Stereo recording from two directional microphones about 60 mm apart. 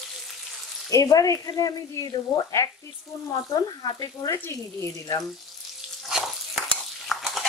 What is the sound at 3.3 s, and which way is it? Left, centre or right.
Speech, left.